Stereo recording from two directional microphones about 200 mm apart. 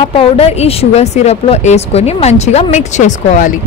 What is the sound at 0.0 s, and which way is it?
Speech, 30° left (ahead or behind).